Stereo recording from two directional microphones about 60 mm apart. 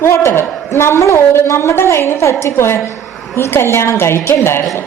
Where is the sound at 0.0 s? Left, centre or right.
Left.